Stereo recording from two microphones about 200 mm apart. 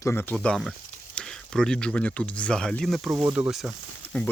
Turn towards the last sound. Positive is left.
turn(degrees=0)  # may be behind; listen again after turning